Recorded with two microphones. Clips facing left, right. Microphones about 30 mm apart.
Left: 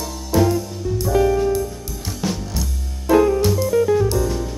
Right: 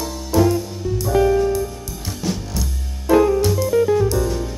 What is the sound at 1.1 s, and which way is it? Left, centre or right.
Music, centre.